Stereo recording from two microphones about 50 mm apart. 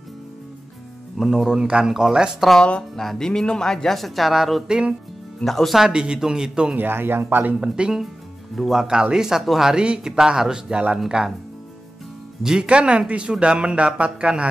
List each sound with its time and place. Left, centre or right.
1.1 s speech: centre
3.0 s speech: centre
3.3 s speech: centre
4.6 s speech: centre
5.4 s speech: centre
5.8 s speech: centre
6.8 s speech: right
7.6 s speech: centre
8.5 s speech: centre
12.4 s speech: centre